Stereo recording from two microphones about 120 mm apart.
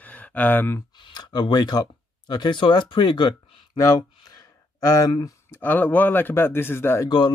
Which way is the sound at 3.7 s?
30° left (ahead or behind).